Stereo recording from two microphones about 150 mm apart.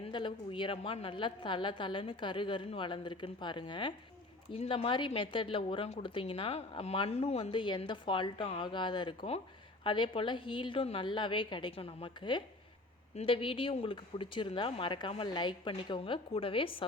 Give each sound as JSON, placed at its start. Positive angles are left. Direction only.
{"t": 0.0, "sound": "speech", "side_deg": 35}